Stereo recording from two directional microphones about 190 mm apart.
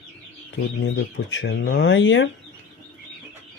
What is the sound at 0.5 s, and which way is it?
Speech, 70° left (ahead or behind).